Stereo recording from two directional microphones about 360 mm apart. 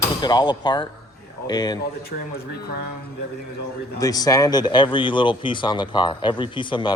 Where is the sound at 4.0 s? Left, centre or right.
Centre.